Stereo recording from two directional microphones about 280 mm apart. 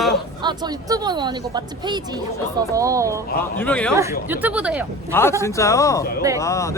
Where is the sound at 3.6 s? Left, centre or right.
Centre.